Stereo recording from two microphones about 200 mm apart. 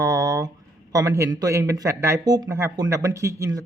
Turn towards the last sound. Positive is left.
turn(degrees=-15)  # may be behind; listen again after turning